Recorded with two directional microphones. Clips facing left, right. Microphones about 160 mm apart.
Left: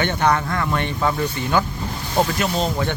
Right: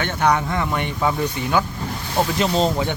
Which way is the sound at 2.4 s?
30° right (ahead or behind).